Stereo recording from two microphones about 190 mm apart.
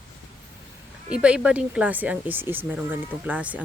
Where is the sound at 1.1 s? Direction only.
5° right (ahead or behind).